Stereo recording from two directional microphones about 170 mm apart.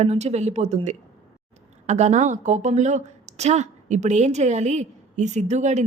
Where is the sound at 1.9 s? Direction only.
40° right (ahead or behind).